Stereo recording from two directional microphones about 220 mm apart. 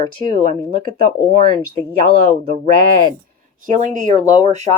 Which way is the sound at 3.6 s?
35° right (ahead or behind).